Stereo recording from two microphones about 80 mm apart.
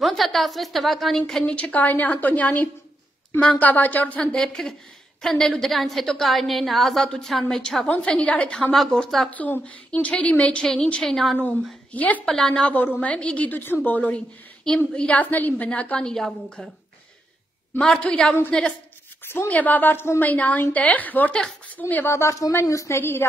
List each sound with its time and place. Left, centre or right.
0.0 s a woman's voice: centre
1.4 s a woman's voice: centre
7.9 s a woman's voice: centre
9.3 s a woman's voice: centre
11.9 s a woman's voice: centre
12.3 s a woman's voice: centre
12.7 s a woman's voice: left; by 16.7 s centre
17.7 s a woman's voice: centre
19.3 s a woman's voice: left
22.1 s a woman's voice: left